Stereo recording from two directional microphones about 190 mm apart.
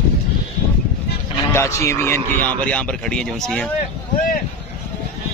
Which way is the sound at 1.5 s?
15° left (ahead or behind).